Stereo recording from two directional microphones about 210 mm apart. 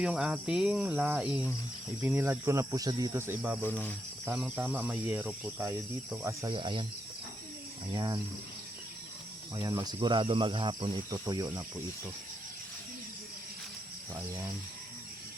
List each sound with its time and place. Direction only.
0.0 s speech: 5° right (ahead or behind)
6.5 s speech: 25° right (ahead or behind)
7.9 s speech: 20° right (ahead or behind)
9.6 s speech: 15° right (ahead or behind)